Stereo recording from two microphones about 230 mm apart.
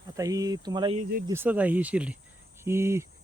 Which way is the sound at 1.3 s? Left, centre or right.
Centre.